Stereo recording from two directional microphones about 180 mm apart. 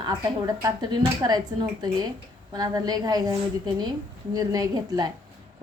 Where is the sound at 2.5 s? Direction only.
20° right (ahead or behind).